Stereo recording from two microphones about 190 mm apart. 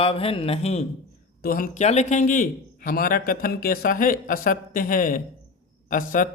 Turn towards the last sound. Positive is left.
turn(degrees=45)  # may be behind; listen again after turning